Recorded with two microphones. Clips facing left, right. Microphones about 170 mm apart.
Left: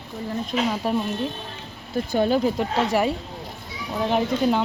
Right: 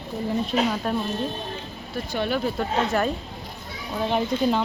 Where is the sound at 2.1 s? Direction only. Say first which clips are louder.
Left 5 dB; 40° left (ahead or behind).